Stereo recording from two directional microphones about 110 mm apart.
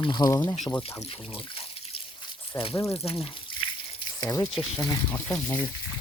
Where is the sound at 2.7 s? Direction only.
25° left (ahead or behind).